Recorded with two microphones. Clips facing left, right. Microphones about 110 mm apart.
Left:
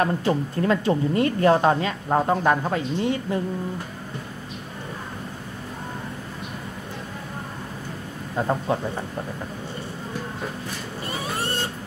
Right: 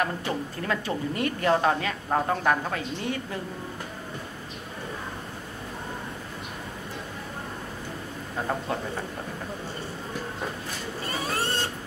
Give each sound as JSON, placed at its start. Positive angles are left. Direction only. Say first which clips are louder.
{"t": 0.0, "sound": "speech", "louder": "left 6 dB", "side_deg": 30}
{"t": 8.5, "sound": "speech", "louder": "left 5 dB", "side_deg": 25}